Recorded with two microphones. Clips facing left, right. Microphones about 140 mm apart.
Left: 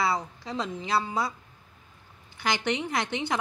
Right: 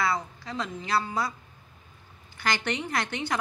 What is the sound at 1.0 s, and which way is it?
Speech, centre (ahead or behind).